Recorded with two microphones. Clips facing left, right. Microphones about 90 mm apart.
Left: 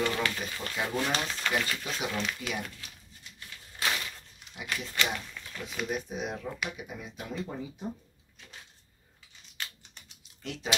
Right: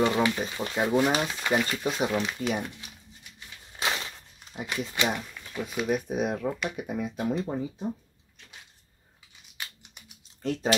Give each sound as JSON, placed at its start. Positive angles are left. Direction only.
{"t": 0.0, "sound": "speech", "side_deg": -20}
{"t": 3.3, "sound": "a sound", "side_deg": -20}
{"t": 4.6, "sound": "speech", "side_deg": -20}
{"t": 6.0, "sound": "speech", "side_deg": -50}
{"t": 7.3, "sound": "speech", "side_deg": -20}
{"t": 9.6, "sound": "scissors", "side_deg": -10}
{"t": 10.4, "sound": "speech", "side_deg": -40}